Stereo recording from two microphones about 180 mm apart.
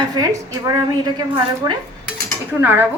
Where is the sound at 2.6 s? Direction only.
10° right (ahead or behind).